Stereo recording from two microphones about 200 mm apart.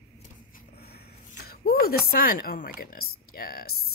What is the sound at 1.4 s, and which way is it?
Speech, 50° left (ahead or behind).